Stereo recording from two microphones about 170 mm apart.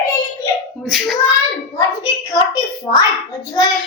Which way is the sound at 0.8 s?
Centre (ahead or behind).